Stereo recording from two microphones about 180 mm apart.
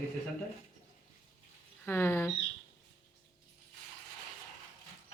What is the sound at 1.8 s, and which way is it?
Speech, 10° left (ahead or behind).